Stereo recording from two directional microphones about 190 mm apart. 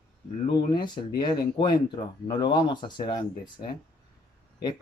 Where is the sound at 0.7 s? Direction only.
25° left (ahead or behind).